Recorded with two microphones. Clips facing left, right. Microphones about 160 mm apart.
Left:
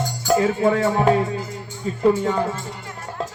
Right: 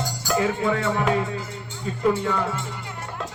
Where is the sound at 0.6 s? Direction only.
40° left (ahead or behind).